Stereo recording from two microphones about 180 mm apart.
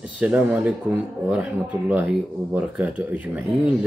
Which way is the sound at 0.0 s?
5° right (ahead or behind).